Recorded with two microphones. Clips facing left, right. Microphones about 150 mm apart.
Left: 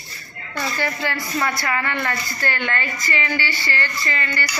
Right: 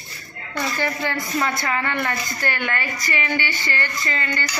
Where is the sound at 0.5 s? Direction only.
15° right (ahead or behind).